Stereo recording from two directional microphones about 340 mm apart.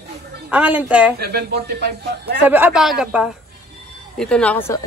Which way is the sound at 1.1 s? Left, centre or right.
Right.